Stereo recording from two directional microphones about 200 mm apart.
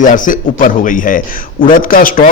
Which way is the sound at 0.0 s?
40° left (ahead or behind).